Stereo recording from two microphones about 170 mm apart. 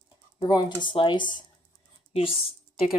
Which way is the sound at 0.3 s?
25° left (ahead or behind).